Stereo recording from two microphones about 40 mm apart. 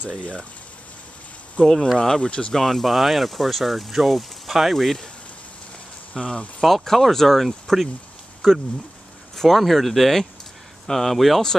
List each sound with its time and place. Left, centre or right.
2.0 s speech: centre
2.5 s speech: centre
6.1 s speech: left
6.6 s speech: centre